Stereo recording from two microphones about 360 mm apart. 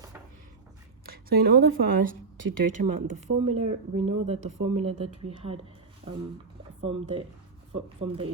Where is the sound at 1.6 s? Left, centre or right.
Right.